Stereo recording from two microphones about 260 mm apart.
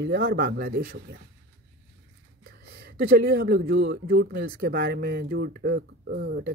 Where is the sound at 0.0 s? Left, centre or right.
Right.